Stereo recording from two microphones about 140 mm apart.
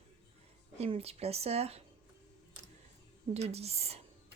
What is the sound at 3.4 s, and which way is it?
Speech, 50° right (ahead or behind).